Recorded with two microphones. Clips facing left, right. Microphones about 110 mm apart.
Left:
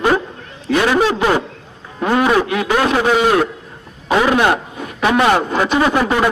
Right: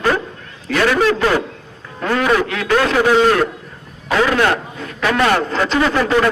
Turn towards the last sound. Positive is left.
turn(degrees=20)  # may be behind; listen again after turning